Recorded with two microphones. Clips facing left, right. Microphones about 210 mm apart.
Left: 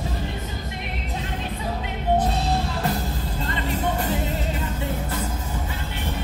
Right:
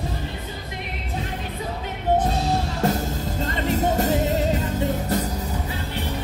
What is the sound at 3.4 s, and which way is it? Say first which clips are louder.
Music: right 4 dB; 45° right (ahead or behind).